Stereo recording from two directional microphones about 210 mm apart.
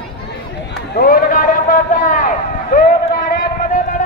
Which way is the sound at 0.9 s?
45° left (ahead or behind).